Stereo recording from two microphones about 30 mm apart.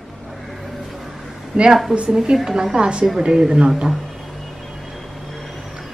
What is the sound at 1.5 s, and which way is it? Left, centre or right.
Speech, right.